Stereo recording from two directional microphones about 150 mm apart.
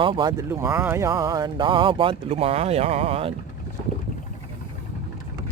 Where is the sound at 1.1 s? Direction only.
25° right (ahead or behind).